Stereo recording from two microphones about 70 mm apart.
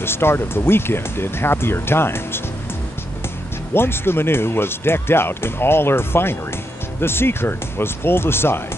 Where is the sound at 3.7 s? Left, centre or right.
Left.